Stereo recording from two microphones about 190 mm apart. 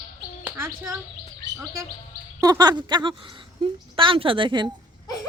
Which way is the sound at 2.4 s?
20° right (ahead or behind).